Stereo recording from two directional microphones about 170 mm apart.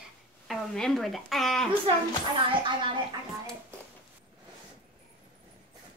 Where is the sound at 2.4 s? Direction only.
30° right (ahead or behind).